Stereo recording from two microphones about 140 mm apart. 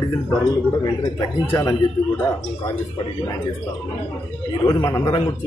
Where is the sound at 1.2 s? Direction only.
25° left (ahead or behind).